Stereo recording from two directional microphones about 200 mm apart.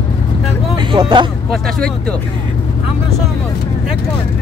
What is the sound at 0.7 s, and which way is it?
Speech, 25° right (ahead or behind).